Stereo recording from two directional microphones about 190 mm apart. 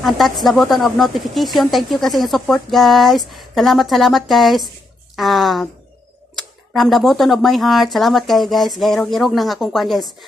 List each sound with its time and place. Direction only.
0.0 s speech: centre (ahead or behind)